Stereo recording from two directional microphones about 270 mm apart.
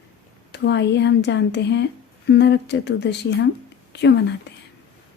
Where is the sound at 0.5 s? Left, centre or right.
Left.